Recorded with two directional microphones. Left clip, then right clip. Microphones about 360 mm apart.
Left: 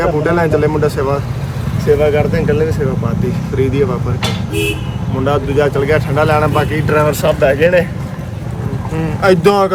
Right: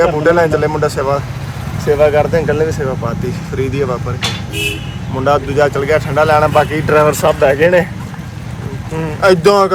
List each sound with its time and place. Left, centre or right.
0.0 s speech: centre
5.2 s speech: centre
9.0 s speech: centre